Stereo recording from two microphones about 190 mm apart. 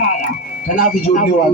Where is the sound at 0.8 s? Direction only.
45° left (ahead or behind).